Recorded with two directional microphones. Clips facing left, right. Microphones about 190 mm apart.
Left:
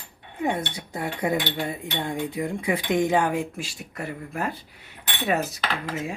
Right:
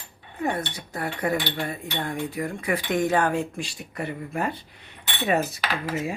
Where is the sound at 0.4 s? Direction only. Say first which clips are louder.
Left 1 dB; 20° left (ahead or behind).